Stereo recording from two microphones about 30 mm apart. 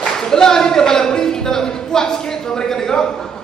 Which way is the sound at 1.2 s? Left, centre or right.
Centre.